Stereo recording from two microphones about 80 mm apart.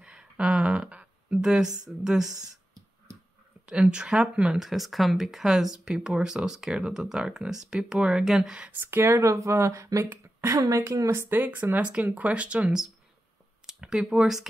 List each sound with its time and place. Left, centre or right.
0.0 s a sound: centre
3.6 s speech: centre
8.7 s speech: right; by 14.5 s centre